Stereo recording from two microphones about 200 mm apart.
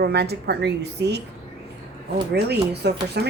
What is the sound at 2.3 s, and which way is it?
Speech, 55° right (ahead or behind).